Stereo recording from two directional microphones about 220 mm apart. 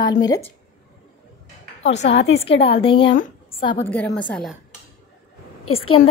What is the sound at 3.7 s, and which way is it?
Speech, 5° left (ahead or behind).